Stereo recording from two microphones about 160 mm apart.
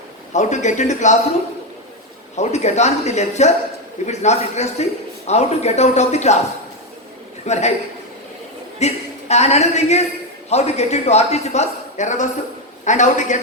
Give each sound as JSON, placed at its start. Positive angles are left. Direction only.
{"t": 0.3, "sound": "speech", "side_deg": 50}
{"t": 2.3, "sound": "speech", "side_deg": 45}
{"t": 7.4, "sound": "a man's voice", "side_deg": 45}
{"t": 8.8, "sound": "a woman's voice", "side_deg": 45}